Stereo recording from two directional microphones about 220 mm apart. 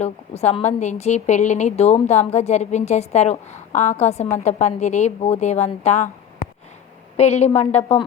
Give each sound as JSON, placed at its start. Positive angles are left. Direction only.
{"t": 0.0, "sound": "a woman's voice", "side_deg": 30}
{"t": 7.2, "sound": "a woman's voice", "side_deg": 30}